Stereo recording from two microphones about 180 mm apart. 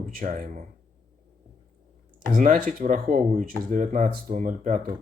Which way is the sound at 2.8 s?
45° right (ahead or behind).